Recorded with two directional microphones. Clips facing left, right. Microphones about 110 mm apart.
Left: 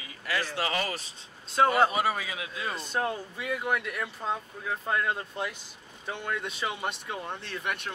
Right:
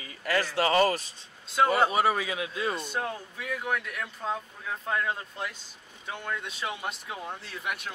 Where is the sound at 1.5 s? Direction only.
Centre (ahead or behind).